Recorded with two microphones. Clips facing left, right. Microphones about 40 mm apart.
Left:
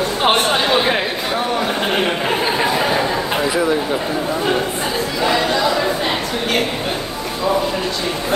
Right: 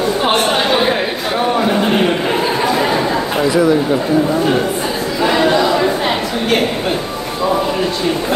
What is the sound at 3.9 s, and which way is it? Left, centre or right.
Speech, centre.